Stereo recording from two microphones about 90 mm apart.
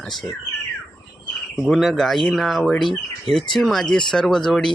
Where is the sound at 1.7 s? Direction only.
5° left (ahead or behind).